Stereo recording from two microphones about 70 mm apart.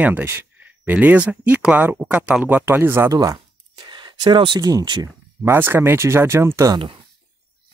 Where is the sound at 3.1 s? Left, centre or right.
Right.